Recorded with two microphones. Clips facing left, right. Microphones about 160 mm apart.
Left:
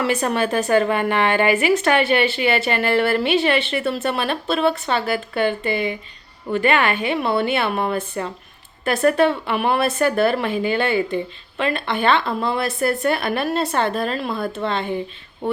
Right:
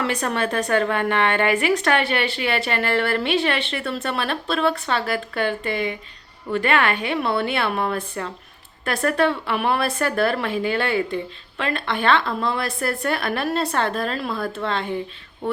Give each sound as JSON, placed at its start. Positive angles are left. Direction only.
{"t": 0.0, "sound": "speech", "side_deg": 5}